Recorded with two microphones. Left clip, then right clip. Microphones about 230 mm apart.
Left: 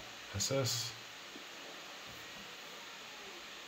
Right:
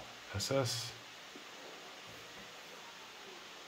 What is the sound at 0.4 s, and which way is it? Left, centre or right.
Speech, centre.